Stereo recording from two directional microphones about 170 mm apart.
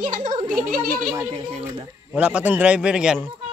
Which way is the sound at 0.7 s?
55° right (ahead or behind).